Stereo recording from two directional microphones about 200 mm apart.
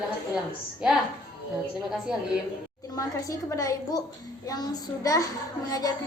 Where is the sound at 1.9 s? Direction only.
5° right (ahead or behind).